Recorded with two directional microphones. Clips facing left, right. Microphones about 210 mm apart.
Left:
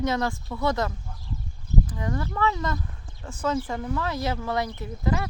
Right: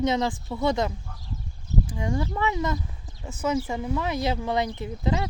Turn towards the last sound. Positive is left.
turn(degrees=-20)  # may be behind; listen again after turning